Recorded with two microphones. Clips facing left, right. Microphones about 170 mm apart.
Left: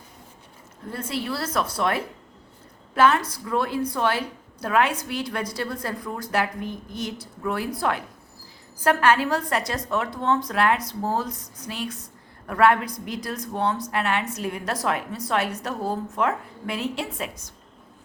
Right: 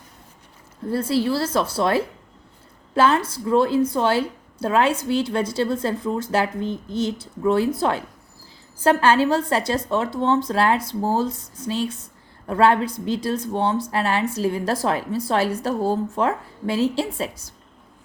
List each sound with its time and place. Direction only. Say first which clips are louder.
0.9 s a woman's voice: right 8 dB; 30° right (ahead or behind)